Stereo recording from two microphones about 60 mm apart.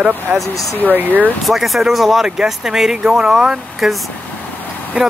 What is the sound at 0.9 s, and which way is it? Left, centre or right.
Speech, right.